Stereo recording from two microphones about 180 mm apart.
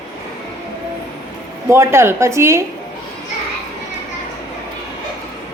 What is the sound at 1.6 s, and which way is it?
Speech, 15° right (ahead or behind).